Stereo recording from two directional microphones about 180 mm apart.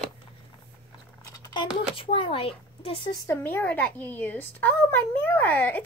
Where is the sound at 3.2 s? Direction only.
15° left (ahead or behind).